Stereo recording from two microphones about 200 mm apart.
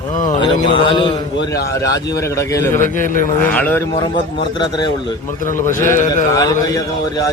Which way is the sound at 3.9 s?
20° left (ahead or behind).